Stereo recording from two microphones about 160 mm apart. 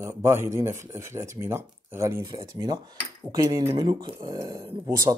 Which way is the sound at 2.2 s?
30° right (ahead or behind).